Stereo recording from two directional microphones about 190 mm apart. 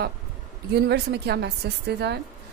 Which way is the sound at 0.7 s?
60° right (ahead or behind).